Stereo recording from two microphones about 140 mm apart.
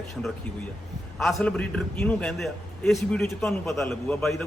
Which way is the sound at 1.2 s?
5° left (ahead or behind).